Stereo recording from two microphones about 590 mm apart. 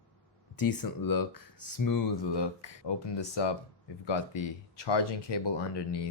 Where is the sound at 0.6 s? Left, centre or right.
Left.